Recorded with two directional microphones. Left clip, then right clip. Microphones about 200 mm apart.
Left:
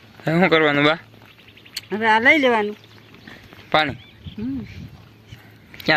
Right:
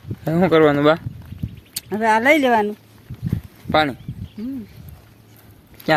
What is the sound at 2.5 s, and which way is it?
Speech, 60° right (ahead or behind).